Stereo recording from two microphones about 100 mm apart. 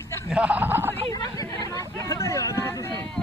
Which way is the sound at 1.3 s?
35° left (ahead or behind).